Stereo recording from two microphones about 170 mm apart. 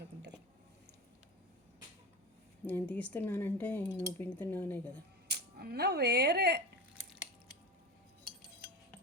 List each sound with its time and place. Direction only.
2.6 s speech: 10° left (ahead or behind)
5.3 s speech: 70° right (ahead or behind)